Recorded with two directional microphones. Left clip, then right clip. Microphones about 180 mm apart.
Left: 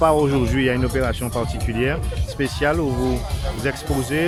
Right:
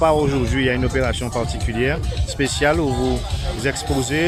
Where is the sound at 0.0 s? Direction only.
15° left (ahead or behind).